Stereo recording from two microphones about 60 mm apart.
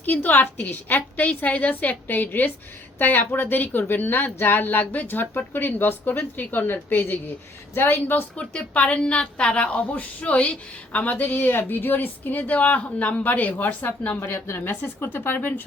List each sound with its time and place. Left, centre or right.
0.0 s a woman's voice: left
8.4 s a woman's voice: left
14.7 s speech: left